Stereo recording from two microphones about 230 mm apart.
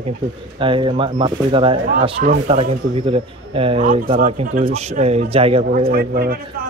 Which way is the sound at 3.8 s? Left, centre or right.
Right.